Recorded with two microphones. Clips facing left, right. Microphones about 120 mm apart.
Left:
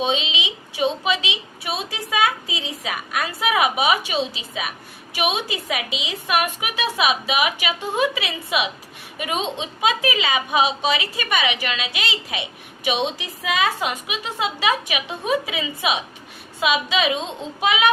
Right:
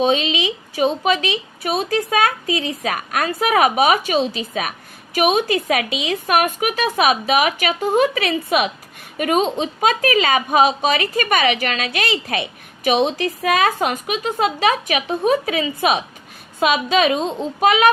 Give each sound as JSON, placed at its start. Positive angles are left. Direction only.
{"t": 0.0, "sound": "a woman's voice", "side_deg": -50}